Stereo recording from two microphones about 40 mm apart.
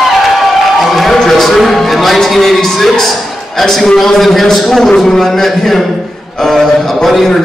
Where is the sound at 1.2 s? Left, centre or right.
Centre.